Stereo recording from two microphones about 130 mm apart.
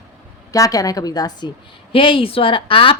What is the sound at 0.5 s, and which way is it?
Speech, 25° left (ahead or behind).